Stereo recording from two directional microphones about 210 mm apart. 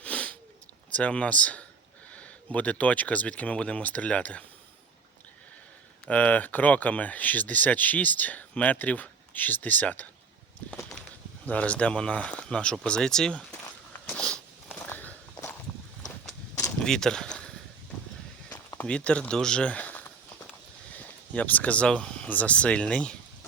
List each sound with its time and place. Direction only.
0.0 s sniff: 5° left (ahead or behind)
0.9 s speech: 5° left (ahead or behind)
6.1 s speech: 5° left (ahead or behind)
10.7 s a sound: 5° left (ahead or behind)
11.4 s speech: 5° left (ahead or behind)
14.1 s walk: 5° left (ahead or behind)
16.6 s a sound: 5° left (ahead or behind)
18.5 s speech: 10° left (ahead or behind)